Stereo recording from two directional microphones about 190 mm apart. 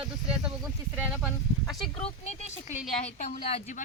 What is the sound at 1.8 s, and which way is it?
Speech, 30° left (ahead or behind).